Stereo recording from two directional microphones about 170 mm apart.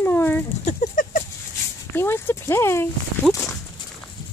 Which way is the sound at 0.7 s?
50° left (ahead or behind).